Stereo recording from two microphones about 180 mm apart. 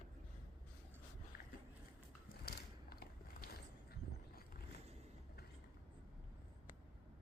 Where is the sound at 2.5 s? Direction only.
60° left (ahead or behind).